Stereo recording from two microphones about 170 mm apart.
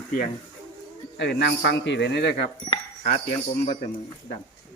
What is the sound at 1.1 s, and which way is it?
Speech, 90° left.